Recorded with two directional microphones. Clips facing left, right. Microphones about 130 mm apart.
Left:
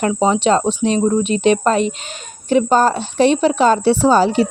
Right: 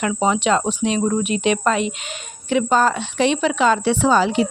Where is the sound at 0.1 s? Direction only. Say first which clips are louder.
Left 2 dB; 30° left (ahead or behind).